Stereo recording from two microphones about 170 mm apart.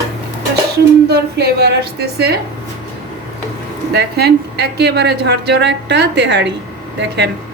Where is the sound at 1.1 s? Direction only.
70° right (ahead or behind).